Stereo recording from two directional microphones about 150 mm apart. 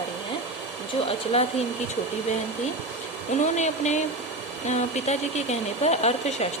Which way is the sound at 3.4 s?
50° left (ahead or behind).